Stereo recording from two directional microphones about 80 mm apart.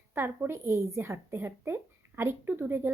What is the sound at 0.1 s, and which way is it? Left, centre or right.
A woman's voice, right.